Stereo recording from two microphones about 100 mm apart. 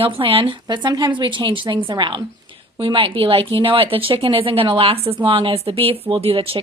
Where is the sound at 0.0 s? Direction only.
65° right (ahead or behind).